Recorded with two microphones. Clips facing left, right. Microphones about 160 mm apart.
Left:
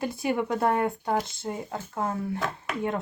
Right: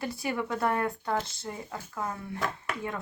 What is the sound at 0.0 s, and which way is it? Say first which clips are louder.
Speech: left 5 dB; 20° left (ahead or behind).